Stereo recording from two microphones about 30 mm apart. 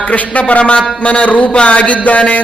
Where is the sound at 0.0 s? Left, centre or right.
Left.